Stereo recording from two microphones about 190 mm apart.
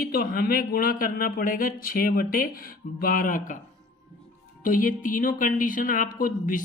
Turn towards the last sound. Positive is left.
turn(degrees=45)  # may be behind; listen again after turning